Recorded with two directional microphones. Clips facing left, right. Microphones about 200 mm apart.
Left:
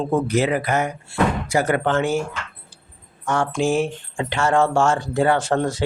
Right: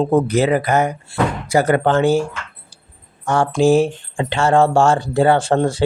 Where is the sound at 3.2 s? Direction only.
35° right (ahead or behind).